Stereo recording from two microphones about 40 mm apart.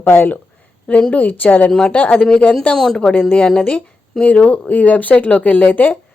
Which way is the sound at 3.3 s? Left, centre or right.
Left.